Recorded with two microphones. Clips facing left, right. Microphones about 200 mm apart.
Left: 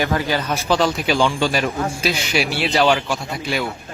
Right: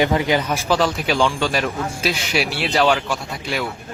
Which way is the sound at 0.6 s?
Centre (ahead or behind).